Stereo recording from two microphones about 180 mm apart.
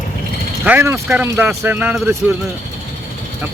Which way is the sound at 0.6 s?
10° right (ahead or behind).